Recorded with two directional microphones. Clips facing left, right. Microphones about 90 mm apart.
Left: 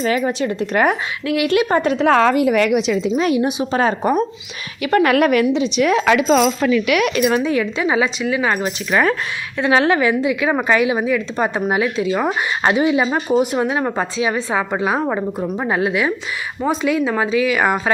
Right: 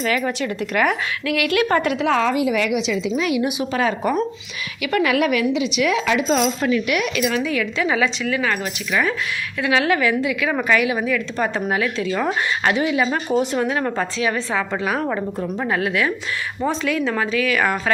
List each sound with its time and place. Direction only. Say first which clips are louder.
0.0 s a woman's voice: left 3 dB; 25° left (ahead or behind)
1.9 s a woman's voice: left 5 dB; 35° left (ahead or behind)
2.1 s a woman's voice: left 6 dB; 50° left (ahead or behind); by 3.9 s 35° left (ahead or behind)
4.0 s speech: left 3 dB; 15° left (ahead or behind)
4.8 s a woman's voice: left 4 dB; 40° left (ahead or behind)
5.5 s a woman's voice: left 3 dB; 35° left (ahead or behind)
6.1 s speech: left 5 dB; 85° left
7.1 s a woman's voice: left 4 dB; 40° left (ahead or behind)
8.9 s a woman's voice: left 4 dB; 50° left (ahead or behind)
9.6 s a woman's voice: left 4 dB; 30° left (ahead or behind)